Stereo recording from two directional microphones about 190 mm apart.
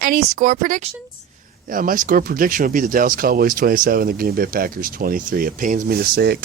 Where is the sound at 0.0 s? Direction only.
50° right (ahead or behind).